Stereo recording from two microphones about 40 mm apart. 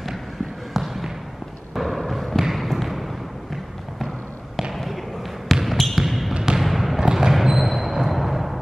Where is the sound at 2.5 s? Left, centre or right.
Centre.